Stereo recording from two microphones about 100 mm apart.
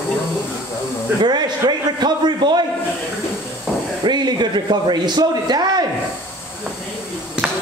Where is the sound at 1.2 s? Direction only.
45° right (ahead or behind).